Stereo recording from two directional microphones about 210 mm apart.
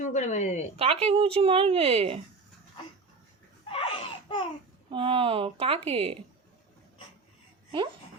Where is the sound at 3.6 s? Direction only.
25° left (ahead or behind).